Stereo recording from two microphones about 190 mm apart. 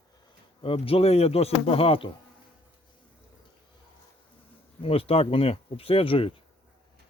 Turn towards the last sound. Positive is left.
turn(degrees=30)  # may be behind; listen again after turning